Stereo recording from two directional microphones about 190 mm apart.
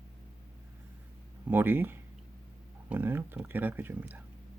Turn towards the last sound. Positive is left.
turn(degrees=-10)  # may be behind; listen again after turning